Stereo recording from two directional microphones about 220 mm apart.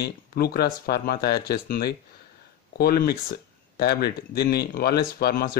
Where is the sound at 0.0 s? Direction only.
45° left (ahead or behind).